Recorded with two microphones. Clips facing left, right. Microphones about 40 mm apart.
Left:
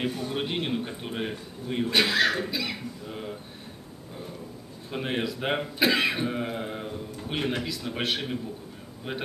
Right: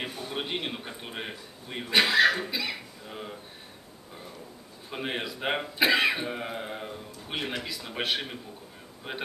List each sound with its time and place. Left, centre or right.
0.0 s a man's voice: centre
4.9 s a man's voice: centre